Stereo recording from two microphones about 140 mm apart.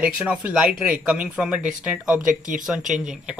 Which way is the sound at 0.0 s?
5° right (ahead or behind).